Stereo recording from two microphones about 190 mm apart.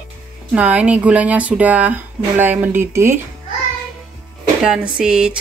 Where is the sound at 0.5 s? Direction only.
10° right (ahead or behind).